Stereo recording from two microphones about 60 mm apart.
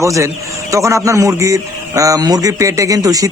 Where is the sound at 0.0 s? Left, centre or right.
Right.